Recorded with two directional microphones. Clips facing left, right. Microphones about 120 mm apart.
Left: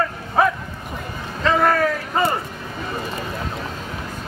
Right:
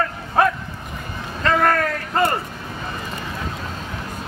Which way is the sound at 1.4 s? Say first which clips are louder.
Left 1 dB; 5° left (ahead or behind).